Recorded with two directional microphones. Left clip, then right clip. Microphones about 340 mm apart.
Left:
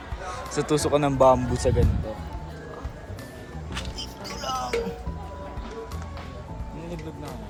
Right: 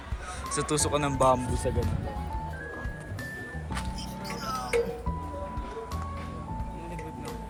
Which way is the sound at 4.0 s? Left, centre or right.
Centre.